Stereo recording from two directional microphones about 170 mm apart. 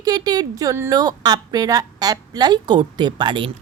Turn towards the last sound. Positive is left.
turn(degrees=-30)  # may be behind; listen again after turning